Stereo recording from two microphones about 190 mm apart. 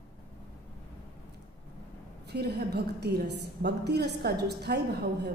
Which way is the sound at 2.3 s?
60° right (ahead or behind).